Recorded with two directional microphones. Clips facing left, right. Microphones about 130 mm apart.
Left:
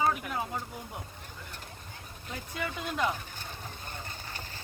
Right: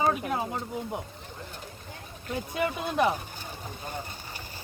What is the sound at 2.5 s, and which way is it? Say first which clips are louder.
Speech: right 6 dB; 20° right (ahead or behind).